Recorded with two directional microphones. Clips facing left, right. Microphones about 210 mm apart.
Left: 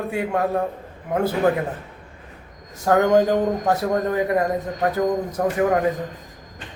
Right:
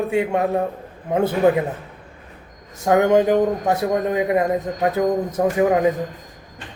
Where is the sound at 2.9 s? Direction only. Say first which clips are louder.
Right 1 dB; 15° right (ahead or behind).